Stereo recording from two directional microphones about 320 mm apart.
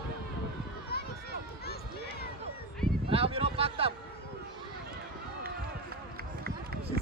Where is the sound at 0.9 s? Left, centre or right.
Left.